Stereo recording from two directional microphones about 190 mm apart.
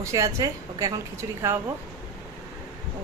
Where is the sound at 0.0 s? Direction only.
15° right (ahead or behind).